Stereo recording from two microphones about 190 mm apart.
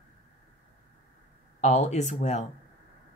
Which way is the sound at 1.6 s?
35° left (ahead or behind).